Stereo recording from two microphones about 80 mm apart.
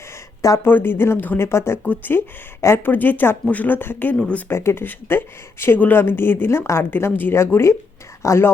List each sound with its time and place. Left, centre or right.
0.6 s speech: left
4.4 s speech: left